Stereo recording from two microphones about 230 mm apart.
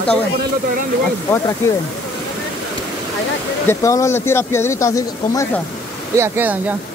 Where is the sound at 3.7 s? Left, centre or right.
Centre.